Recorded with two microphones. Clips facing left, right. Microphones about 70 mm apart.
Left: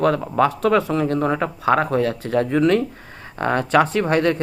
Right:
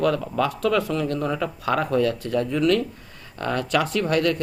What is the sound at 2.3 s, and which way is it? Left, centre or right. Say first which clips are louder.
Speech: left 4 dB; left.